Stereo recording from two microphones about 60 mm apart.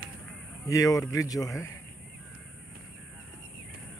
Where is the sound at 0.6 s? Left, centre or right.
Left.